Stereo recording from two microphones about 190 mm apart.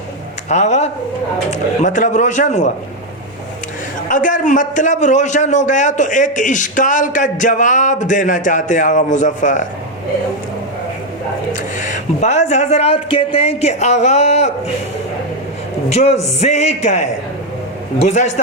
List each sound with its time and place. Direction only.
0.4 s a man's voice: 40° left (ahead or behind)
4.1 s a man's voice: 45° left (ahead or behind)
11.8 s a man's voice: 40° left (ahead or behind)
15.9 s a man's voice: 35° left (ahead or behind)